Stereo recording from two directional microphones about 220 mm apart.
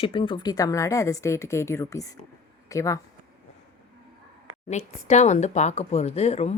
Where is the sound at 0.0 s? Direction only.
25° left (ahead or behind).